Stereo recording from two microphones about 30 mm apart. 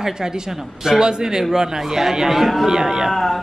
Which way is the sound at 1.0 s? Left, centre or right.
Right.